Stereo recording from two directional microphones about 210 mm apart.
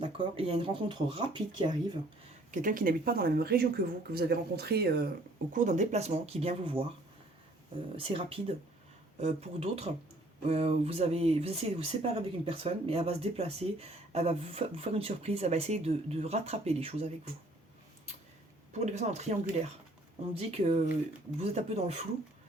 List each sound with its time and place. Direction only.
0.0 s speech: 25° right (ahead or behind)
2.5 s speech: 40° right (ahead or behind)
5.5 s speech: 35° right (ahead or behind)
7.9 s speech: 25° right (ahead or behind)
18.7 s speech: 30° right (ahead or behind)